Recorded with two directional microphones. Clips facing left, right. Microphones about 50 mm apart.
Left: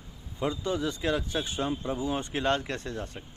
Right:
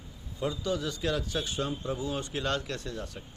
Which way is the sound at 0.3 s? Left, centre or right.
Left.